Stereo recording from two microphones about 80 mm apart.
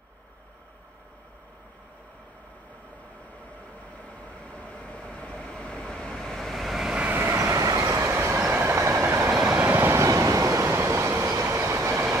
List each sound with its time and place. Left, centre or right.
4.0 s vehicle: centre
7.0 s vehicle: right
7.2 s train: right
8.0 s train: right
9.5 s train: right